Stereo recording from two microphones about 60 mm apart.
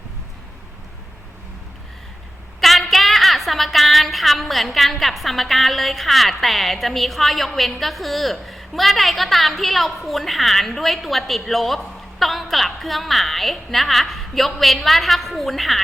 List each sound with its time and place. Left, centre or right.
2.6 s a woman's voice: centre